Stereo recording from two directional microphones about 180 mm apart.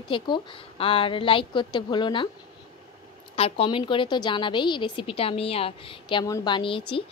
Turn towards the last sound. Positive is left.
turn(degrees=30)  # may be behind; listen again after turning